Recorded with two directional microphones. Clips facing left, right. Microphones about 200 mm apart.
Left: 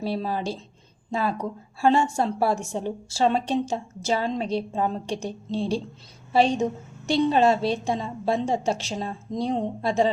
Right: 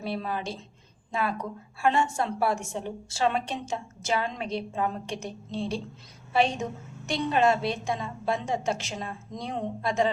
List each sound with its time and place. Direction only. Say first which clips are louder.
0.0 s a woman's voice: left 4 dB; 35° left (ahead or behind)